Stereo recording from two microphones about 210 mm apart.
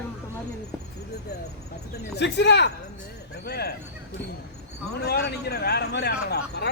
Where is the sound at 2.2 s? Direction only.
55° left (ahead or behind).